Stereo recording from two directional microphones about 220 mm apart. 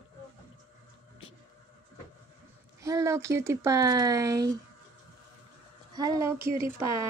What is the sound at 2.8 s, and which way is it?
Speech, 15° right (ahead or behind).